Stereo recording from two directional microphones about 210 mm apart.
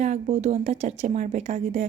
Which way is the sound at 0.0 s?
35° right (ahead or behind).